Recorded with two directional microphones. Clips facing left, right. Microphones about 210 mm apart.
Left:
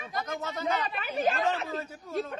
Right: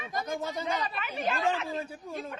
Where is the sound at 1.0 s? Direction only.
40° left (ahead or behind).